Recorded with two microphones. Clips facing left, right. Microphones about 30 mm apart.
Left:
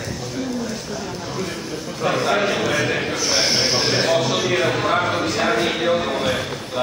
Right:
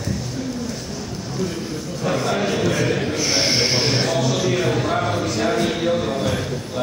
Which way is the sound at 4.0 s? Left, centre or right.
Left.